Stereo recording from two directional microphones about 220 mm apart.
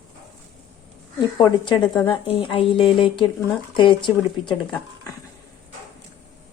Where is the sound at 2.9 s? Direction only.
20° left (ahead or behind).